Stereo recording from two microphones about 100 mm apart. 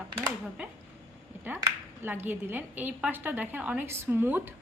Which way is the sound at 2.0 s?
20° right (ahead or behind).